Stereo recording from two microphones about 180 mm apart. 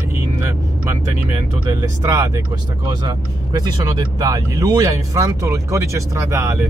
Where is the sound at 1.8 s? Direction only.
15° right (ahead or behind).